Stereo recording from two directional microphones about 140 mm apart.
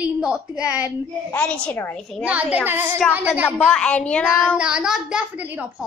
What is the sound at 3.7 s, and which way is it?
Speech, 5° left (ahead or behind).